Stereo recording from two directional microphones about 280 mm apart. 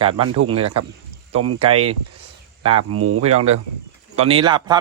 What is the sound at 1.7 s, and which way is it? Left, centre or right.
Speech, right.